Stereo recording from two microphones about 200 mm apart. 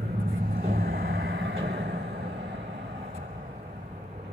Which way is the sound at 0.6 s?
45° right (ahead or behind).